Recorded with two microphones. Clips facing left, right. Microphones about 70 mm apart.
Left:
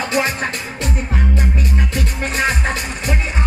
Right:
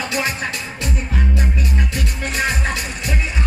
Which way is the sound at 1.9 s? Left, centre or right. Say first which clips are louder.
Left 2 dB; left.